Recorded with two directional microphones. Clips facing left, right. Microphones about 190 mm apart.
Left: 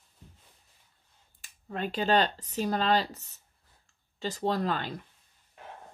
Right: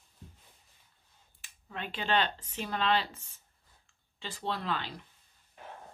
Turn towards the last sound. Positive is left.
turn(degrees=45)  # may be behind; listen again after turning